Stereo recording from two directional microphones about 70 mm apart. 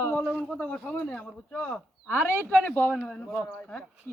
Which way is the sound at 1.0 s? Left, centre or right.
Centre.